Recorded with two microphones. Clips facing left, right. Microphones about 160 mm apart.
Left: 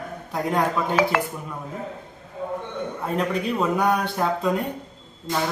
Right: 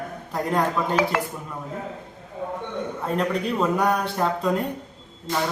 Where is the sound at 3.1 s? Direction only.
Centre (ahead or behind).